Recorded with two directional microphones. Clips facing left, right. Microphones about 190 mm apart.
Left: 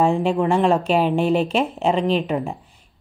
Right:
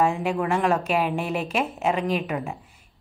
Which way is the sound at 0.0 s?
30° left (ahead or behind).